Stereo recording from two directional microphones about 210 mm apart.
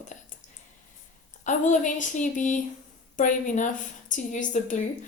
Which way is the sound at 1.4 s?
35° left (ahead or behind).